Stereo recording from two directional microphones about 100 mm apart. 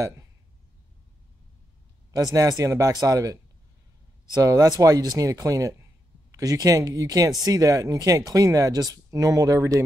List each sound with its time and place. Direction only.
2.1 s speech: 35° right (ahead or behind)
4.4 s speech: 40° right (ahead or behind)